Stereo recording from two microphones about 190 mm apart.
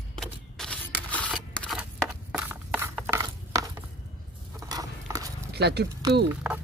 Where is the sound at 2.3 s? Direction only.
10° right (ahead or behind).